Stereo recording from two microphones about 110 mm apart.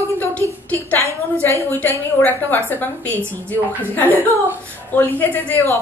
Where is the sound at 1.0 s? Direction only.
25° right (ahead or behind).